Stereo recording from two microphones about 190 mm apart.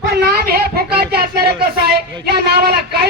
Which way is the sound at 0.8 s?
55° right (ahead or behind).